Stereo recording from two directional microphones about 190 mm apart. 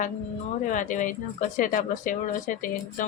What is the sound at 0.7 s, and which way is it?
Speech, 40° left (ahead or behind).